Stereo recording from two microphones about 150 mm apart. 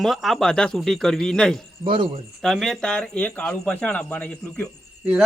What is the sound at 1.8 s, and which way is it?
Speech, 35° right (ahead or behind).